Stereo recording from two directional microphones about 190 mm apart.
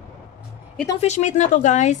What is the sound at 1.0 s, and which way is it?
Speech, 40° left (ahead or behind).